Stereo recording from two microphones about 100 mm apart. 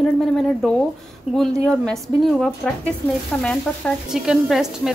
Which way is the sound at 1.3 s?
5° right (ahead or behind).